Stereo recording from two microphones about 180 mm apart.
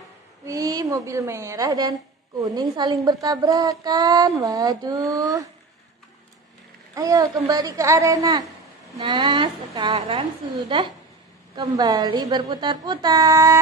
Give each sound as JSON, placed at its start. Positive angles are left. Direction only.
{"t": 0.5, "sound": "a woman's voice", "side_deg": -20}
{"t": 7.0, "sound": "speech", "side_deg": -20}
{"t": 11.5, "sound": "speech", "side_deg": -25}